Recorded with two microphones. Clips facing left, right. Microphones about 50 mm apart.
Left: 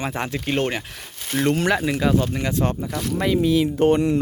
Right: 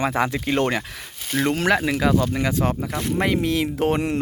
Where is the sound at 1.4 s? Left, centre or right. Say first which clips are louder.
Even; right.